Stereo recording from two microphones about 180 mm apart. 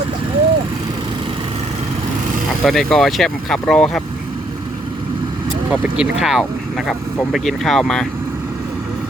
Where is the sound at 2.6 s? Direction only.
Centre (ahead or behind).